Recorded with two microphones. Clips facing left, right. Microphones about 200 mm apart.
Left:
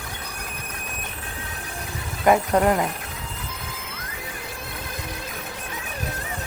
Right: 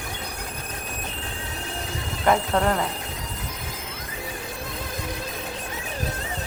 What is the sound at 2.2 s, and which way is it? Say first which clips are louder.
Speech: left 3 dB; 15° left (ahead or behind).